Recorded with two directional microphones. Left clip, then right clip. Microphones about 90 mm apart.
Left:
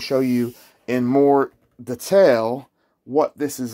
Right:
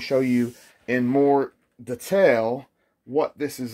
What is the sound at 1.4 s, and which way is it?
Speech, 65° left (ahead or behind).